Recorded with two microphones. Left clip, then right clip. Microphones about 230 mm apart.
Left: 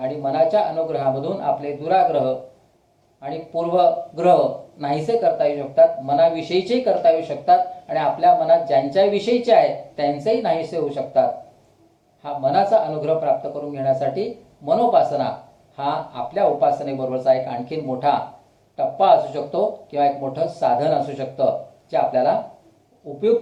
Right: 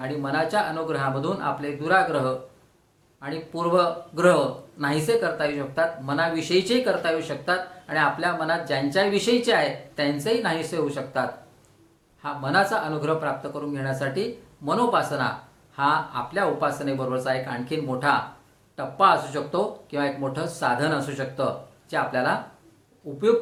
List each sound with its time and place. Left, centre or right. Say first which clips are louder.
0.0 s speech: left 7 dB; right
3.8 s speech: left 6 dB; right